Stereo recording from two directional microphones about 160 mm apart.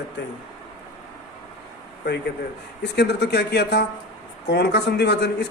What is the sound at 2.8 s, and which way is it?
Speech, 90° left.